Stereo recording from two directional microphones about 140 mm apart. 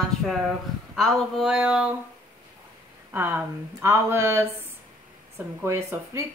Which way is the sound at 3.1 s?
15° right (ahead or behind).